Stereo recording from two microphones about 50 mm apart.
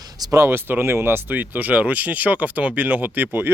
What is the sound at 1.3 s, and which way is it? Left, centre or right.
Speech, right.